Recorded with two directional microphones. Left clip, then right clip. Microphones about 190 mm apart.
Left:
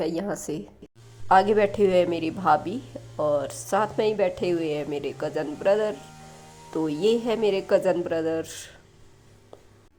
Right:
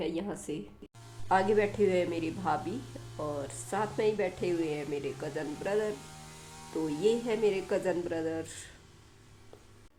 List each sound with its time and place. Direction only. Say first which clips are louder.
0.0 s a woman's voice: left 7 dB; 35° left (ahead or behind)